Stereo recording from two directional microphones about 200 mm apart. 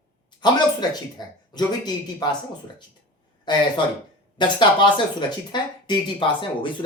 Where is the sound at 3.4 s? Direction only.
20° left (ahead or behind).